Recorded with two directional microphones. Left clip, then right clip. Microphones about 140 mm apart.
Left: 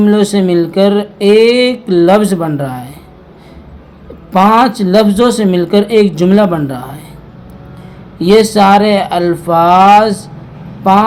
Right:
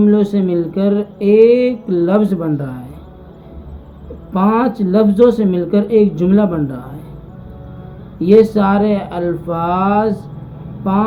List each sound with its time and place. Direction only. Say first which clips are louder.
0.0 s speech: left 4 dB; 50° left (ahead or behind)
4.3 s a woman's voice: left 8 dB; 55° left (ahead or behind)
8.2 s speech: left 3 dB; 55° left (ahead or behind)